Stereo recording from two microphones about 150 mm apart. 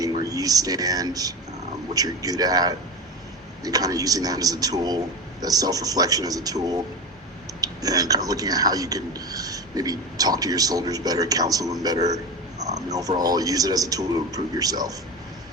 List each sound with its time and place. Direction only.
0.0 s speech: 25° right (ahead or behind)